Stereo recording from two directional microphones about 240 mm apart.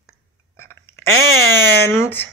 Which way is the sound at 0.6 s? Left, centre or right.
Centre.